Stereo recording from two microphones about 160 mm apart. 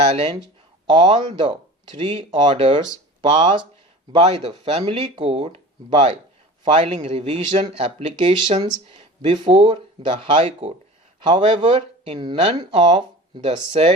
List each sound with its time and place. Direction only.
0.0 s speech: 40° right (ahead or behind)
0.9 s speech: 30° right (ahead or behind)
4.2 s speech: 40° right (ahead or behind)
8.9 s a sound: 35° right (ahead or behind)
9.4 s speech: 30° right (ahead or behind)